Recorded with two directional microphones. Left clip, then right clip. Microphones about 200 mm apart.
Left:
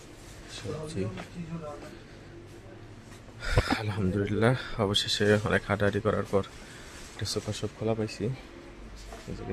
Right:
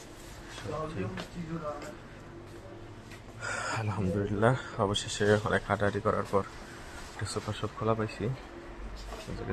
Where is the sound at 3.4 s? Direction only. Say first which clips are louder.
Left 4 dB; 20° left (ahead or behind); by 8.1 s 35° left (ahead or behind).